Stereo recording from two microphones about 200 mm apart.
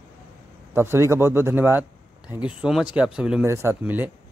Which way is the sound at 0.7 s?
10° right (ahead or behind).